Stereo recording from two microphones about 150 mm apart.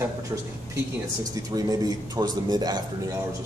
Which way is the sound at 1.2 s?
25° right (ahead or behind).